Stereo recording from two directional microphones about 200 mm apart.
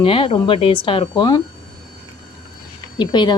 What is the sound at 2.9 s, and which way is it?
Speech, 20° left (ahead or behind).